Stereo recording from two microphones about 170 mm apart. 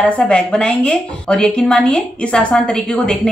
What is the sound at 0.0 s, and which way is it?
A woman's voice, 5° left (ahead or behind).